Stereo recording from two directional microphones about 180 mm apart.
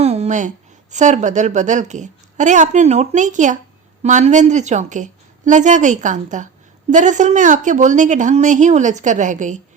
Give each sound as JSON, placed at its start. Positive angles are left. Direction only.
{"t": 0.0, "sound": "a woman's voice", "side_deg": -35}